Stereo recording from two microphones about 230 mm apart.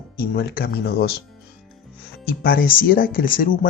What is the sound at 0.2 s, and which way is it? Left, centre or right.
Speech, left.